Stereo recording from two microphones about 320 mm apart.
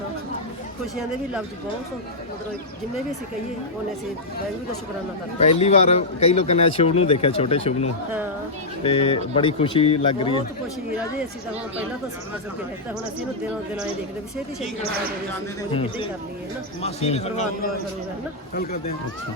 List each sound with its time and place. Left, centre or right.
5.5 s a man's voice: centre
15.7 s a man's voice: centre